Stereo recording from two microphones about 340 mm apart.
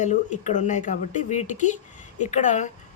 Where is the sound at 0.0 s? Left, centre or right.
Left.